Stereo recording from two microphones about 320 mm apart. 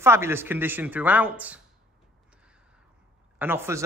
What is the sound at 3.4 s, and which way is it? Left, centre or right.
Speech, centre.